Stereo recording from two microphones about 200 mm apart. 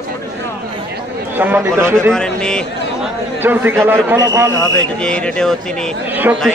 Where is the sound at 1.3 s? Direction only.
10° right (ahead or behind).